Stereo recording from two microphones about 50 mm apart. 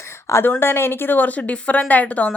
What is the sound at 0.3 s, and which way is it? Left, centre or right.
Speech, left.